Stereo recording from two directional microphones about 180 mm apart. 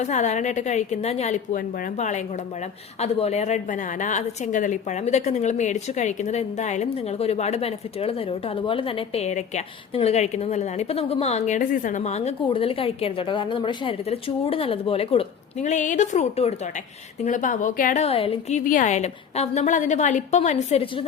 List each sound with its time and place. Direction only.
0.0 s a woman's voice: 40° left (ahead or behind)